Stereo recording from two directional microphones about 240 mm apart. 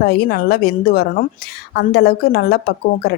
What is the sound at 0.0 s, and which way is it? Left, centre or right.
Speech, left.